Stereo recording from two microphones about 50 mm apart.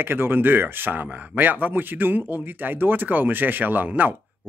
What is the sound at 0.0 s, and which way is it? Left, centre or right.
Speech, right.